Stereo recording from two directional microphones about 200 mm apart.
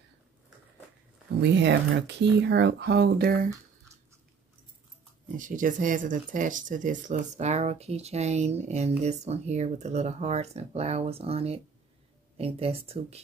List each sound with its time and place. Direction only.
1.4 s speech: 60° right (ahead or behind)
5.4 s speech: 40° right (ahead or behind)